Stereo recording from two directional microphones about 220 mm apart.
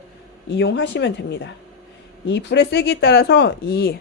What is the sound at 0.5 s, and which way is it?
A woman's voice, 55° left (ahead or behind).